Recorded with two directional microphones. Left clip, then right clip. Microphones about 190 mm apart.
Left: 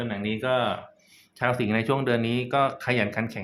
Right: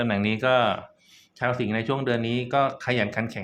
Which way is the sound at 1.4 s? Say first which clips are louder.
Left 1 dB; centre (ahead or behind).